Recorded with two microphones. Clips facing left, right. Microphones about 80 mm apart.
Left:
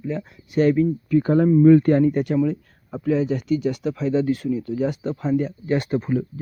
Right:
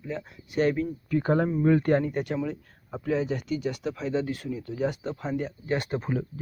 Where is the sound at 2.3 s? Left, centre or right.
Centre.